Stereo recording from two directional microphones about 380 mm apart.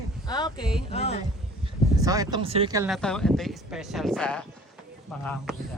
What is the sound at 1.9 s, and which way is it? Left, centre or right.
Speech, centre.